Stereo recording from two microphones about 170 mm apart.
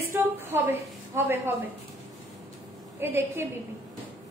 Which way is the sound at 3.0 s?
15° right (ahead or behind).